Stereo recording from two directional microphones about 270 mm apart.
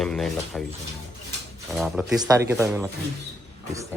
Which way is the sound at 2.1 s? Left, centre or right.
Centre.